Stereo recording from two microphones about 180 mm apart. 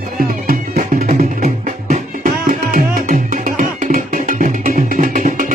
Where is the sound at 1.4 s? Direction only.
50° right (ahead or behind).